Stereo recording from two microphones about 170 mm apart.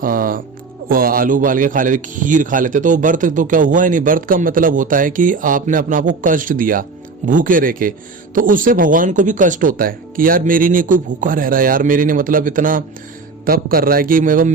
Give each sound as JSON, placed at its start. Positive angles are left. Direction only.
{"t": 0.0, "sound": "music", "side_deg": -55}
{"t": 0.9, "sound": "a man's voice", "side_deg": -60}